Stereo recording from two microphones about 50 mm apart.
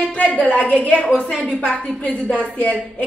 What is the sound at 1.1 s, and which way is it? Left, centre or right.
Speech, centre.